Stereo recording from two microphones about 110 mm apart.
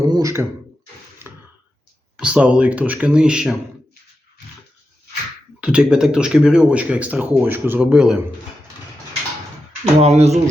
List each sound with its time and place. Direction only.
0.0 s speech: 30° right (ahead or behind)
2.1 s speech: 10° right (ahead or behind)
5.5 s speech: 10° right (ahead or behind)
10.0 s speech: 75° right (ahead or behind)